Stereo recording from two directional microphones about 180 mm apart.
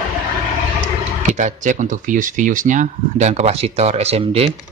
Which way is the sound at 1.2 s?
45° right (ahead or behind).